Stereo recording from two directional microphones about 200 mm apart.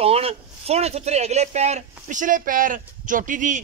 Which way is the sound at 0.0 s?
30° right (ahead or behind).